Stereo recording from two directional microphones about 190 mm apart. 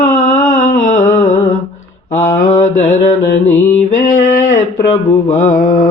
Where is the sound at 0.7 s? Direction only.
40° left (ahead or behind).